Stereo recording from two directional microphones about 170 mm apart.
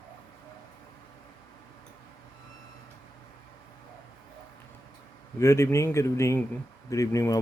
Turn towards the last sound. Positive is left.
turn(degrees=20)  # may be behind; listen again after turning